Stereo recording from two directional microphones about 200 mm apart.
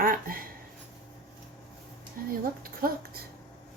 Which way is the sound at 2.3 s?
45° right (ahead or behind).